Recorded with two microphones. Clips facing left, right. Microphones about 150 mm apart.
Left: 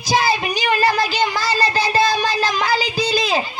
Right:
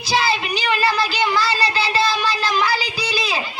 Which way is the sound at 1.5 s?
45° left (ahead or behind).